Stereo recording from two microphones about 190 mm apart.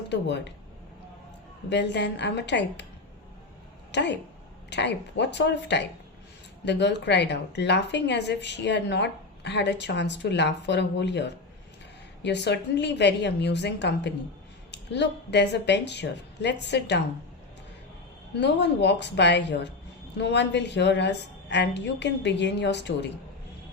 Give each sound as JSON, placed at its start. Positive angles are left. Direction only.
{"t": 0.1, "sound": "a woman's voice", "side_deg": 65}
{"t": 1.7, "sound": "a woman's voice", "side_deg": 65}
{"t": 3.9, "sound": "a woman's voice", "side_deg": 65}
{"t": 18.3, "sound": "a woman's voice", "side_deg": 65}